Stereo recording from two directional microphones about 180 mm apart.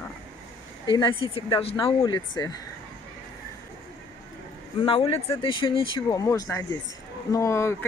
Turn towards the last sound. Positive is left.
turn(degrees=15)  # may be behind; listen again after turning